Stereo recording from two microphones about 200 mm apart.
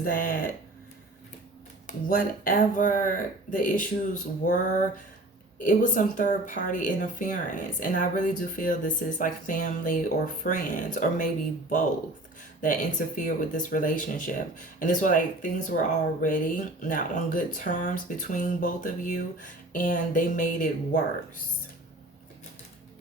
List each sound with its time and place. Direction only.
0.0 s speech: 45° left (ahead or behind)
1.9 s speech: 45° left (ahead or behind)
5.5 s speech: 40° left (ahead or behind)
12.6 s speech: 40° left (ahead or behind)